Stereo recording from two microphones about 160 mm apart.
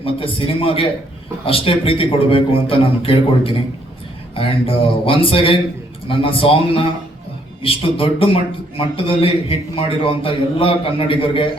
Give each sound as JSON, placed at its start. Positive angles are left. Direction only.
{"t": 0.0, "sound": "a man's voice", "side_deg": 35}
{"t": 7.6, "sound": "a man's voice", "side_deg": 35}